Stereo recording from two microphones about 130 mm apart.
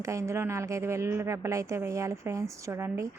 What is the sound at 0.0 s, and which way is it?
A woman's voice, 25° right (ahead or behind).